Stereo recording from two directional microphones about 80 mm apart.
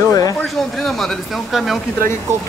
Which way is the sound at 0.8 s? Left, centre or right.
Centre.